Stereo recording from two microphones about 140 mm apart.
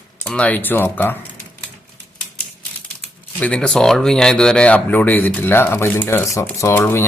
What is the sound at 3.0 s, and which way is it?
Speech, 5° left (ahead or behind).